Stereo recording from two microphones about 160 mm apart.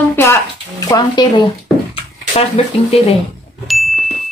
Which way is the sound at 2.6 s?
40° left (ahead or behind).